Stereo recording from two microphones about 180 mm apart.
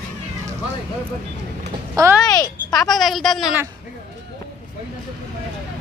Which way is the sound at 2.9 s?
Centre (ahead or behind).